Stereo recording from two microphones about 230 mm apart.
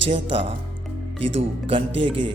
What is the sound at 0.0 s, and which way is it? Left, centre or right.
Speech, right.